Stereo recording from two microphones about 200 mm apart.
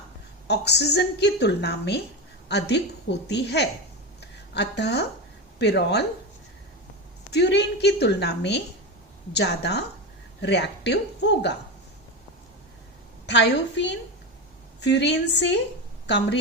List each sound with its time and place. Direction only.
0.4 s a woman's voice: 55° left (ahead or behind)
7.3 s a woman's voice: 55° left (ahead or behind)
13.2 s a woman's voice: 60° left (ahead or behind)